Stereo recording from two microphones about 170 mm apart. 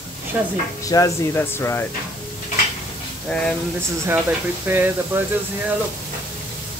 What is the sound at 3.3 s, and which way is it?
Speech, 5° left (ahead or behind).